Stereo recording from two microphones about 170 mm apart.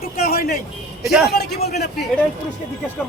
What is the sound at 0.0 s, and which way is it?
Music, 60° left (ahead or behind).